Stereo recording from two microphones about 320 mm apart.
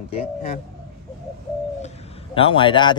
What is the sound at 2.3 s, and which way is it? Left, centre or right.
Speech, centre.